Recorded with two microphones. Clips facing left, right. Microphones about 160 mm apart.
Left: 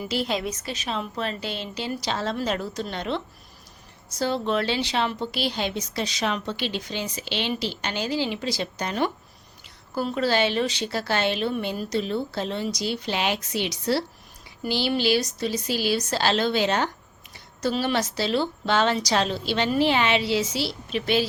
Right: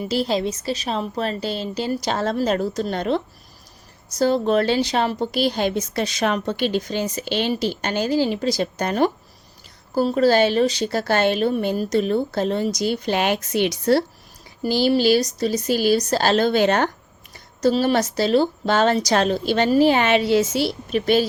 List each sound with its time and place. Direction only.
0.0 s a woman's voice: 35° right (ahead or behind); by 14.0 s 50° right (ahead or behind)
14.6 s a woman's voice: 40° right (ahead or behind)
17.3 s a woman's voice: 40° right (ahead or behind)